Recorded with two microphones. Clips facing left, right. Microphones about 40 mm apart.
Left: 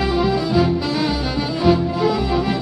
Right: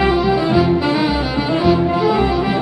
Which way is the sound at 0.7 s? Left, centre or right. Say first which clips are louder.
Right 4 dB; right.